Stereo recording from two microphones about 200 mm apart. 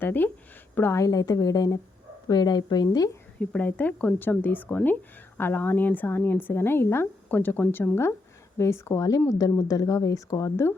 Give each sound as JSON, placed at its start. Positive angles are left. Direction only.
{"t": 0.0, "sound": "a woman's voice", "side_deg": 10}
{"t": 3.4, "sound": "speech", "side_deg": 5}